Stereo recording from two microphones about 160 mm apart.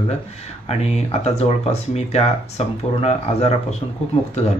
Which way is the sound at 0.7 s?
40° left (ahead or behind).